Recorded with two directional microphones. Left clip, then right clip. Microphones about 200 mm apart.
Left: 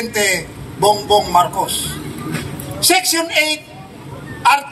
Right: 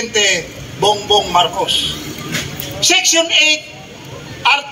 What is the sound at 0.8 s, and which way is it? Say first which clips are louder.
Speech: even; 25° left (ahead or behind).